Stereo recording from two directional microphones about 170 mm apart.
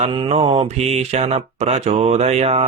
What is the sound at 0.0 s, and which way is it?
Speech, 30° right (ahead or behind).